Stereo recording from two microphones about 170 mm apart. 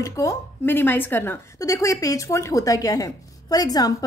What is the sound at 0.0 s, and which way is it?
Speech, 20° left (ahead or behind).